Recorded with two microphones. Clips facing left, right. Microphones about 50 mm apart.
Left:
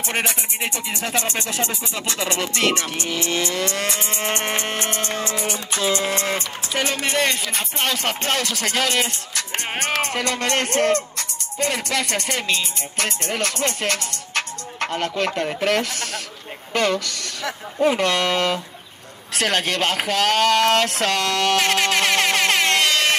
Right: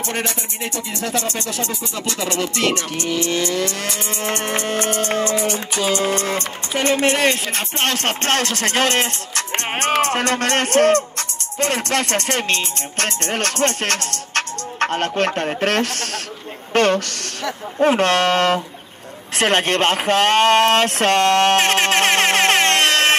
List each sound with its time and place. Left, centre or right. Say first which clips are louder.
1.0 s speech: right 1 dB; left
2.4 s music: right 1 dB; left
5.0 s music: right 6 dB; right
10.1 s speech: right 3 dB; right
15.6 s music: right 1 dB; right
19.4 s speech: right 4 dB; right